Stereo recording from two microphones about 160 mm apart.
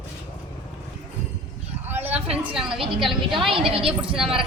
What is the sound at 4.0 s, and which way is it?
Speech, 5° right (ahead or behind).